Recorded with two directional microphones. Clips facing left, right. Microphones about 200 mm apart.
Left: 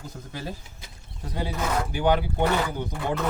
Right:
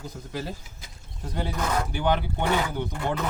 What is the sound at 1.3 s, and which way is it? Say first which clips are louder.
Speech: even; 5° left (ahead or behind).